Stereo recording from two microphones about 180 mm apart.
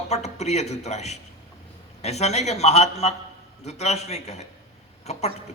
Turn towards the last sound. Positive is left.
turn(degrees=35)  # may be behind; listen again after turning